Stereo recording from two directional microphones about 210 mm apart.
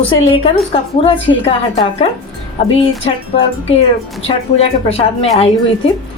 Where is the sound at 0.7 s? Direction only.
25° left (ahead or behind).